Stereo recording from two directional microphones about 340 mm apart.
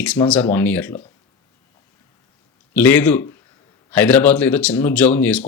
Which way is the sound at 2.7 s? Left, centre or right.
Centre.